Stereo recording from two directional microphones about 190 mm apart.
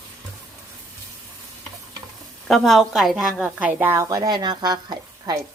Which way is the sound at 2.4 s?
Centre (ahead or behind).